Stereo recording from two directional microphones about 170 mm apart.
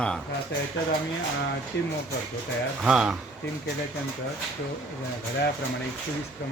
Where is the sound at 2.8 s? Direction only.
5° right (ahead or behind).